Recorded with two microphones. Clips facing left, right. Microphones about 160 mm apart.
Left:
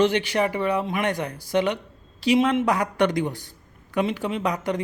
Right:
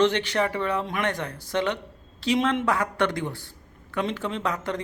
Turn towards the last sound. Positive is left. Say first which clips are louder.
# left 3 dB
turn(degrees=15)  # may be behind; listen again after turning